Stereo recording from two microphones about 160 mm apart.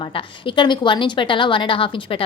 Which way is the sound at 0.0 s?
35° left (ahead or behind).